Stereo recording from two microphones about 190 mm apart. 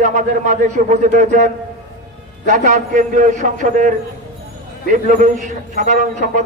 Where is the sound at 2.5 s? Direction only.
40° right (ahead or behind).